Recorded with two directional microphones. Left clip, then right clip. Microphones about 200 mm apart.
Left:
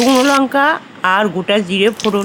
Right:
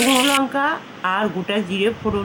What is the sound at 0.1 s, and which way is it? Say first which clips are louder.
Speech: left 5 dB; 50° left (ahead or behind).